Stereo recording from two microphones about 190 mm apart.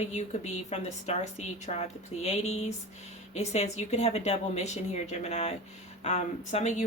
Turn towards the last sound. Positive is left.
turn(degrees=40)  # may be behind; listen again after turning